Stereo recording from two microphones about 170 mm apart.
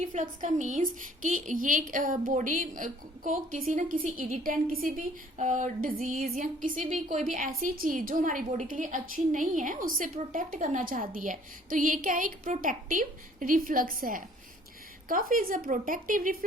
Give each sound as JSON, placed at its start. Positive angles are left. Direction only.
{"t": 0.1, "sound": "a woman's voice", "side_deg": -45}